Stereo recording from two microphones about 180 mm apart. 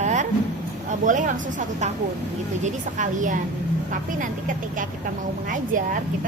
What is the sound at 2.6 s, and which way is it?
A woman's voice, 45° right (ahead or behind).